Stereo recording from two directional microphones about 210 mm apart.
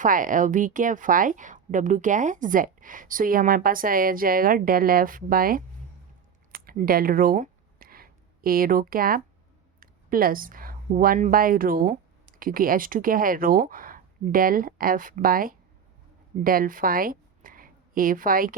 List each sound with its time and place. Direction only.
0.0 s a woman's voice: 40° right (ahead or behind)
6.5 s a sound: 45° right (ahead or behind)
9.8 s a woman's voice: 45° right (ahead or behind)